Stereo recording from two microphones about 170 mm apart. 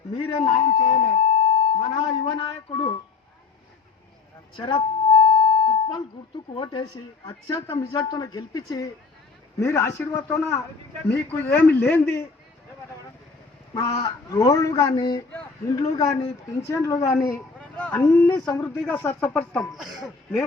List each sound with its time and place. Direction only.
0.1 s speech: 35° left (ahead or behind)
4.5 s a sound: 30° left (ahead or behind)
7.3 s speech: 25° left (ahead or behind)
13.8 s speech: 25° left (ahead or behind)
15.3 s a sound: 15° left (ahead or behind)
16.0 s speech: 20° left (ahead or behind)
17.6 s speech: 10° left (ahead or behind)